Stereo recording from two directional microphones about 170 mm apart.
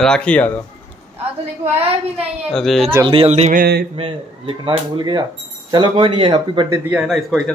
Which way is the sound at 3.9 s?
30° right (ahead or behind).